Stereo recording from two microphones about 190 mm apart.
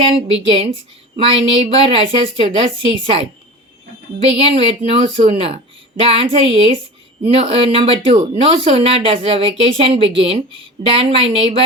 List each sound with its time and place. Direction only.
0.2 s a woman's voice: 30° right (ahead or behind)
4.3 s a woman's voice: 30° right (ahead or behind)